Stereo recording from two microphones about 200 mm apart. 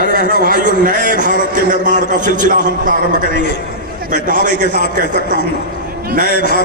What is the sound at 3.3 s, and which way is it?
Speech, 55° left (ahead or behind).